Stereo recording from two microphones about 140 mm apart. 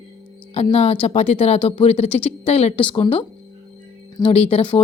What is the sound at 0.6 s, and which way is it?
A woman's voice, 50° left (ahead or behind).